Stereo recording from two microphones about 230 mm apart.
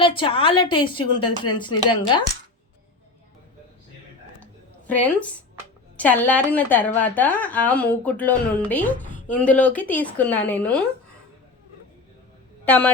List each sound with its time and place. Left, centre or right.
0.0 s speech: left
4.9 s speech: centre
12.6 s speech: centre